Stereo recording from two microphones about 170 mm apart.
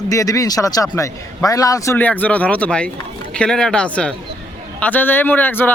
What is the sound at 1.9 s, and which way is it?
Speech, 10° left (ahead or behind).